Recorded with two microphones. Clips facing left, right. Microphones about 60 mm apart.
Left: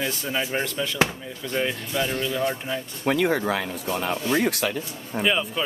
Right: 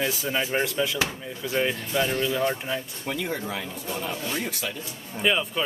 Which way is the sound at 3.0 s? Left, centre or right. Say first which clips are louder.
Left 10 dB; left.